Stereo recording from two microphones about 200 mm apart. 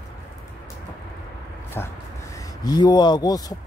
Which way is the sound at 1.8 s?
10° left (ahead or behind).